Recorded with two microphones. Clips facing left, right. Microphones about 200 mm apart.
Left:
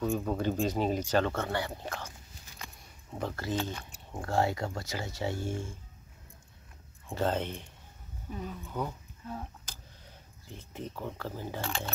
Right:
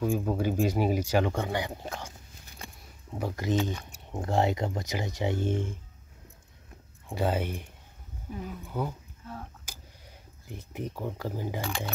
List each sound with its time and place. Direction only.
0.0 s speech: 10° right (ahead or behind)
3.2 s speech: 15° right (ahead or behind)
7.1 s speech: 10° right (ahead or behind)
9.2 s speech: 5° left (ahead or behind)
9.7 s a sound: 10° right (ahead or behind)